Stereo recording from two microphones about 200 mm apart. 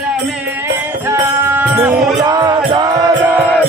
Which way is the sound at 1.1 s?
10° right (ahead or behind).